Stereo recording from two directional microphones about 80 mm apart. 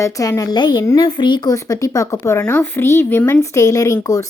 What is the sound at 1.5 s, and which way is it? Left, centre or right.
Speech, left.